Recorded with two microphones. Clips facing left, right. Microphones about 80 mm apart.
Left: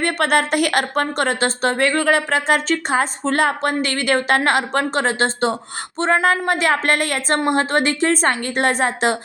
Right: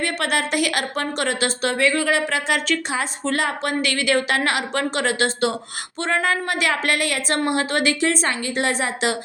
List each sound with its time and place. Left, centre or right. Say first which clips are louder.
0.0 s a woman's voice: left 5 dB; left